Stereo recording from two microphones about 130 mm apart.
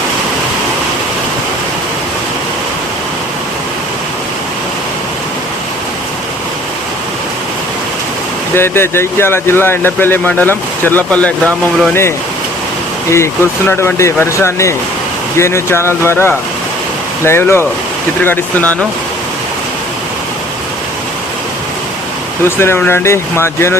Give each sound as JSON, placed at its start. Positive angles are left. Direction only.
{"t": 8.5, "sound": "speech", "side_deg": 20}
{"t": 22.4, "sound": "speech", "side_deg": 20}